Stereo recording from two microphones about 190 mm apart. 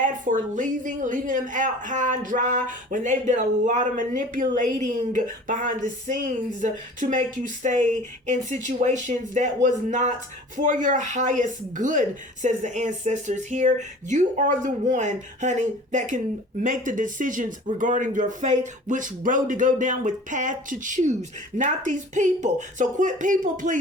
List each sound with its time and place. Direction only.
0.0 s a woman's voice: 40° right (ahead or behind)